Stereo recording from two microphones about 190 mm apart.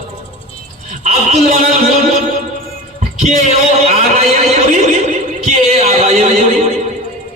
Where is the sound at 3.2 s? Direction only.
35° right (ahead or behind).